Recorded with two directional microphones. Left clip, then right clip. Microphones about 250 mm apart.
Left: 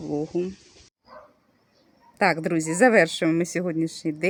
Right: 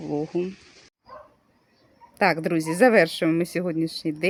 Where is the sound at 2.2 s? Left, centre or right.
Centre.